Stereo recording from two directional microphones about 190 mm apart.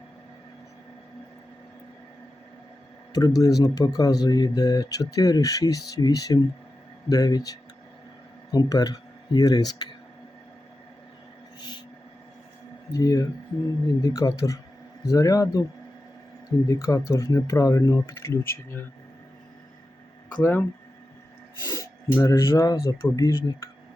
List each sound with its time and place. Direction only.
3.1 s speech: 20° left (ahead or behind)
13.0 s speech: 15° left (ahead or behind)
16.6 s speech: 15° left (ahead or behind)
20.3 s speech: 10° left (ahead or behind)